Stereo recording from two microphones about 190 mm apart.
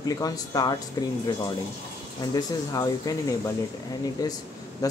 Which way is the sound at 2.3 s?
20° left (ahead or behind).